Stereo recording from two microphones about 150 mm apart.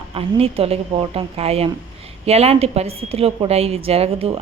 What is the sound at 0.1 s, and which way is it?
A woman's voice, 40° right (ahead or behind).